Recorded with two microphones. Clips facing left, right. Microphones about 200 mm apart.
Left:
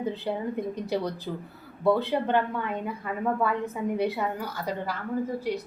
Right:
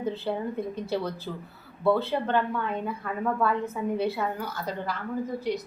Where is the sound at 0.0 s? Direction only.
15° left (ahead or behind).